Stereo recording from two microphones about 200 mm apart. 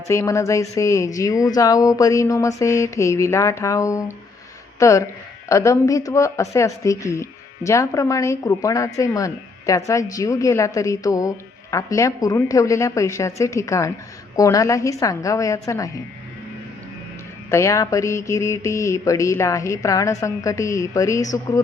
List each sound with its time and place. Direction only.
0.1 s speech: 15° left (ahead or behind)
17.5 s speech: 15° left (ahead or behind)